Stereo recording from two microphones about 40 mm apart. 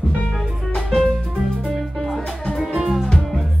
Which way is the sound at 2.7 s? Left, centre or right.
Centre.